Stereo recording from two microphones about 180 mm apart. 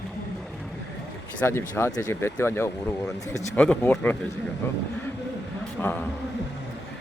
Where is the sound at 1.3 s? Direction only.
10° left (ahead or behind).